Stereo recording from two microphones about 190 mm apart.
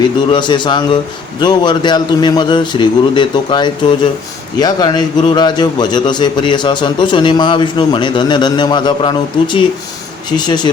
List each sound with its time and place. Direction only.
0.0 s a man's voice: 25° left (ahead or behind)